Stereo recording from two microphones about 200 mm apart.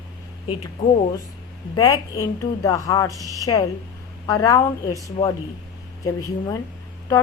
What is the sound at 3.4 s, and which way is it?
Speech, 15° left (ahead or behind).